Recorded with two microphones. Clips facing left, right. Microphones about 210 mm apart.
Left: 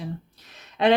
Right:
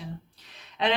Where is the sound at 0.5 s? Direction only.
45° left (ahead or behind).